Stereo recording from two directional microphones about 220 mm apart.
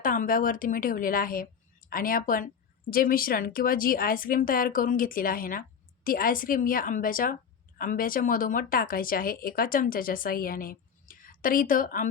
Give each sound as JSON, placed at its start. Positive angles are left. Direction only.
{"t": 0.0, "sound": "a woman's voice", "side_deg": 40}